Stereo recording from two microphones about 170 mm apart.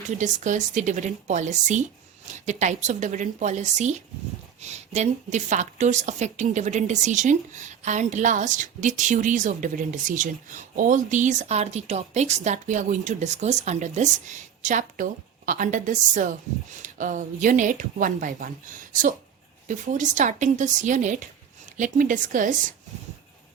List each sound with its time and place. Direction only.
0.2 s a woman's voice: 45° right (ahead or behind)